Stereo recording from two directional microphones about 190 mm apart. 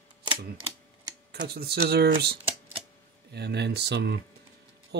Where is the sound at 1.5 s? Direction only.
55° right (ahead or behind).